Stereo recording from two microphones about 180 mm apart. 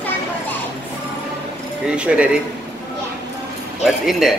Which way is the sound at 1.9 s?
5° right (ahead or behind).